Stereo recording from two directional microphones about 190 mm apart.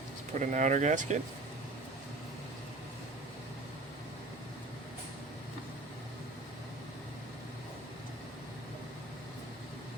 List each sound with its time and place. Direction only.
0.3 s speech: 40° right (ahead or behind)